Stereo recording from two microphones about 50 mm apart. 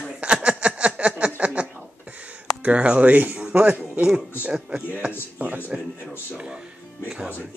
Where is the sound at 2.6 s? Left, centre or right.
Right.